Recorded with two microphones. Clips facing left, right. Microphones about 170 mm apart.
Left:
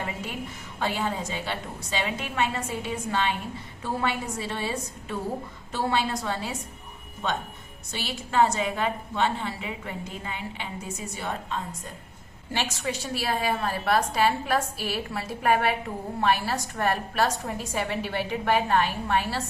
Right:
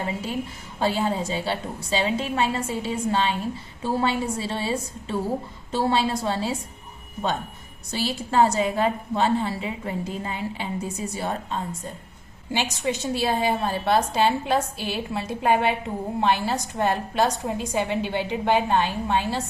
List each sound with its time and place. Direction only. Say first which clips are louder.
0.8 s a woman's voice: right 5 dB; 30° right (ahead or behind)
7.9 s a woman's voice: right 7 dB; 35° right (ahead or behind)
12.5 s a woman's voice: right 4 dB; 15° right (ahead or behind)